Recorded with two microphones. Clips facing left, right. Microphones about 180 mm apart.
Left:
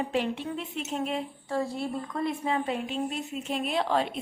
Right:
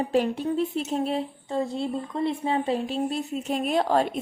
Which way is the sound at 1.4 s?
20° right (ahead or behind).